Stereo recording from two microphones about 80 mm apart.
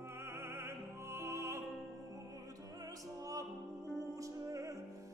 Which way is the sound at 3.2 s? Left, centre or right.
Right.